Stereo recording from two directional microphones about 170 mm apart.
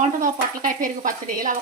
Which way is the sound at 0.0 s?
50° right (ahead or behind).